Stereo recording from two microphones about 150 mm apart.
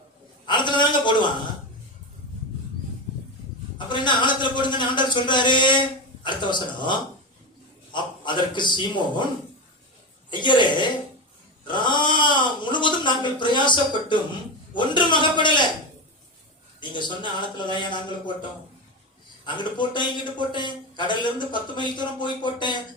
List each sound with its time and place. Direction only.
0.4 s a sound: 30° left (ahead or behind)
3.8 s a man's voice: 30° left (ahead or behind)
10.2 s a man's voice: 30° left (ahead or behind)
11.7 s a sound: 30° left (ahead or behind)
14.7 s a man's voice: 30° left (ahead or behind)
17.7 s a man's voice: 30° left (ahead or behind)
19.5 s a man's voice: 30° left (ahead or behind)